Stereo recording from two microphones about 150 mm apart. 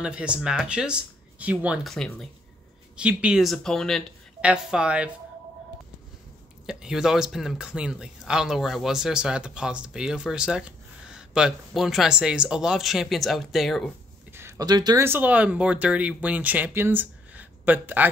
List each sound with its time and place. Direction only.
0.0 s speech: 5° right (ahead or behind)
3.0 s speech: 10° right (ahead or behind)
6.6 s speech: 5° right (ahead or behind)
14.3 s a sound: 15° right (ahead or behind)
14.7 s speech: 25° right (ahead or behind)
15.0 s speech: 10° right (ahead or behind)